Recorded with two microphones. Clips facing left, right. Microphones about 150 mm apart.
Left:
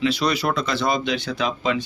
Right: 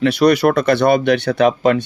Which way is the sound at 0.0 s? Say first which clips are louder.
Right 9 dB; 60° right (ahead or behind).